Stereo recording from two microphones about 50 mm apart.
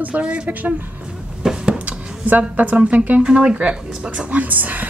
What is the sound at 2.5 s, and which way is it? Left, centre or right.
A woman's voice, right.